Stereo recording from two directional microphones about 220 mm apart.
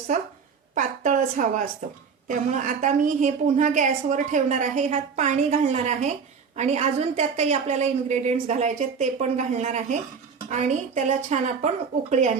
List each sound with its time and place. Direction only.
0.7 s a woman's voice: 35° right (ahead or behind)